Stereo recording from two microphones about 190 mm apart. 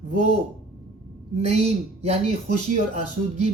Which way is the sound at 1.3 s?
35° right (ahead or behind).